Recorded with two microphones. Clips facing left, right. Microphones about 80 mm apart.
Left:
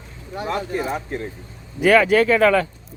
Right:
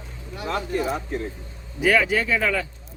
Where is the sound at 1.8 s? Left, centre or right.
Left.